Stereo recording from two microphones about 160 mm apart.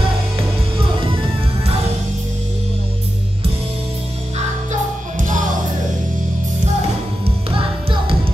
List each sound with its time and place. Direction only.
5.1 s music: 55° right (ahead or behind)